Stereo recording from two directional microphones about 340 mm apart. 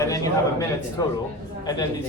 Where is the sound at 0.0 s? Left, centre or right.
Centre.